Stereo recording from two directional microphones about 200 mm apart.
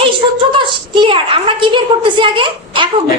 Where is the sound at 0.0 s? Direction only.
25° right (ahead or behind).